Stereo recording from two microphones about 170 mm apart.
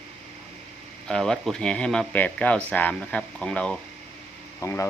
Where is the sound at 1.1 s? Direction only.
5° left (ahead or behind).